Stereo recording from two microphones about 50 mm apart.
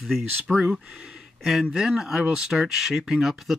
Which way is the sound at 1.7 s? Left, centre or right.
Centre.